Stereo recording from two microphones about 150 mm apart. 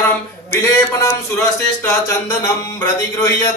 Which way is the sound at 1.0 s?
15° left (ahead or behind).